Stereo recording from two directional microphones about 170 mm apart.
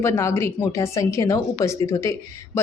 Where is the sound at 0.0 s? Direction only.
15° left (ahead or behind).